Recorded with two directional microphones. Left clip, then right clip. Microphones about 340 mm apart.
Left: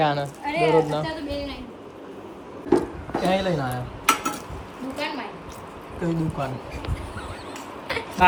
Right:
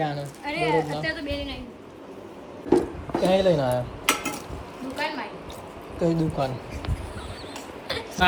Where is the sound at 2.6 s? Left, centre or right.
Centre.